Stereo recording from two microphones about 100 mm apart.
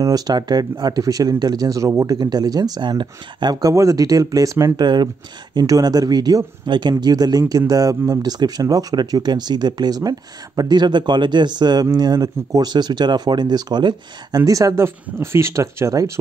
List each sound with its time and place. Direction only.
0.0 s speech: 40° right (ahead or behind)
2.1 s speech: 45° right (ahead or behind)
3.7 s speech: 35° right (ahead or behind)
4.8 s speech: 45° right (ahead or behind)